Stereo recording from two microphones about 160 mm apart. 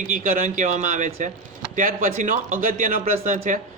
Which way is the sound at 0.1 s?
55° right (ahead or behind).